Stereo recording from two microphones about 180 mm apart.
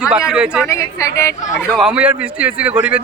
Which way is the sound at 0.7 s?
15° left (ahead or behind).